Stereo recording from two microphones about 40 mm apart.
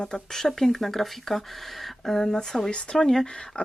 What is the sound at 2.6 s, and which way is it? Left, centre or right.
Speech, left.